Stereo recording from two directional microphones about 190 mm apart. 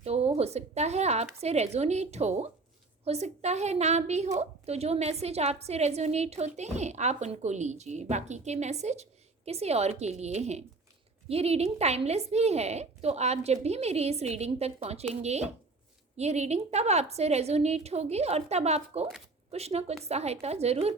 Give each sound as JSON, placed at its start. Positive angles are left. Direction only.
{"t": 0.0, "sound": "a woman's voice", "side_deg": -35}